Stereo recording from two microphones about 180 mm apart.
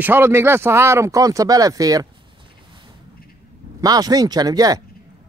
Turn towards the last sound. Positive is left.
turn(degrees=-20)  # may be behind; listen again after turning